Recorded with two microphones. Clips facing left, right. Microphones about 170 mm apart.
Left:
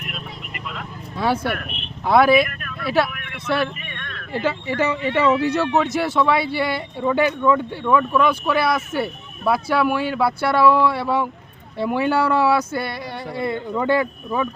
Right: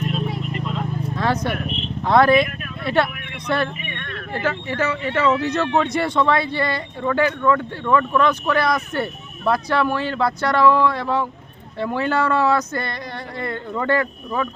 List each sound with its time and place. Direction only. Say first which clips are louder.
1.1 s speech: left 2 dB; 10° left (ahead or behind)
3.8 s a sound: right 4 dB; 5° right (ahead or behind)
4.3 s speech: left 2 dB; 15° left (ahead or behind)